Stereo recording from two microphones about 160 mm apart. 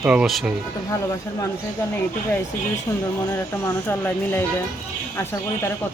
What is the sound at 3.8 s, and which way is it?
Speech, 15° left (ahead or behind).